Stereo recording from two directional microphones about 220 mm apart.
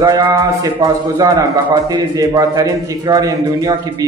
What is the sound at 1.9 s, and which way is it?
A man's voice, 15° right (ahead or behind).